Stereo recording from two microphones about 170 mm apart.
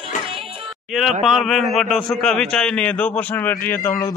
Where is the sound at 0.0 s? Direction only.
30° right (ahead or behind).